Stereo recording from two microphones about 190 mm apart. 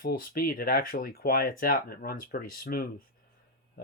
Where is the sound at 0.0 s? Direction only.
50° left (ahead or behind).